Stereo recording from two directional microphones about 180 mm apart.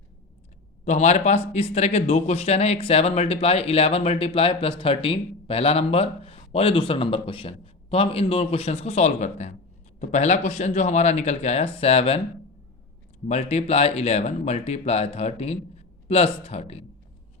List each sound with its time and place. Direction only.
0.9 s speech: 40° left (ahead or behind)
13.2 s speech: 40° left (ahead or behind)